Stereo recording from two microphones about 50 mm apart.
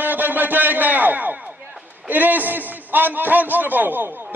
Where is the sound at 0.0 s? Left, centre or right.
Right.